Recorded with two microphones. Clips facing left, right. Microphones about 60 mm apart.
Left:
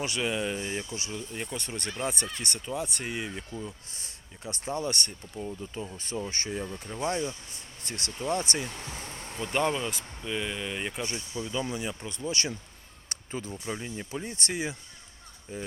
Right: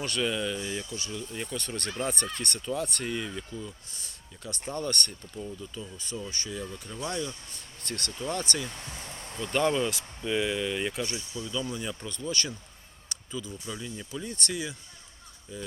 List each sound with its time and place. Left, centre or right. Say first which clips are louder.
0.0 s speech: even; centre
0.4 s speech: even; left; by 5.4 s centre
5.5 s speech: left 3 dB; left
7.9 s speech: left 2 dB; centre
8.9 s a sound: left 2 dB; centre
9.4 s speech: right 2 dB; centre
9.9 s speech: right 4 dB; centre
10.6 s speech: right 3 dB; centre
11.7 s speech: left 1 dB; centre
13.1 s speech: left 1 dB; left
14.3 s speech: even; left